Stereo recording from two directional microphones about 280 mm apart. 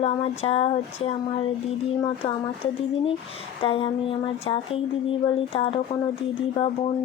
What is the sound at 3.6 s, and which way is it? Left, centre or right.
Speech, centre.